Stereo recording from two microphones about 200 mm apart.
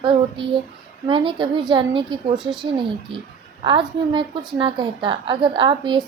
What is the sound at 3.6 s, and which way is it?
A woman's voice, 20° right (ahead or behind).